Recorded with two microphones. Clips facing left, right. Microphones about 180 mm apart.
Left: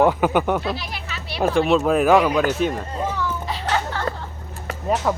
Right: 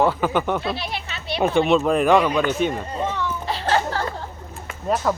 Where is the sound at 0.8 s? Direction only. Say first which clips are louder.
Right 2 dB; 25° right (ahead or behind).